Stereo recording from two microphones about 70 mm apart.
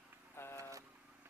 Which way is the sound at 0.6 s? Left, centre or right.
Right.